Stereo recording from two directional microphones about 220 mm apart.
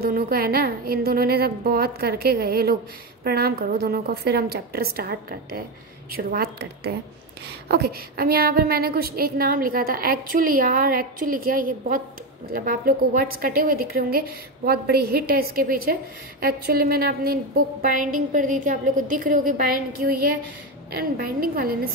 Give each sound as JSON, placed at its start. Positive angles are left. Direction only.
{"t": 0.0, "sound": "a woman's voice", "side_deg": -40}
{"t": 21.0, "sound": "a woman's voice", "side_deg": -40}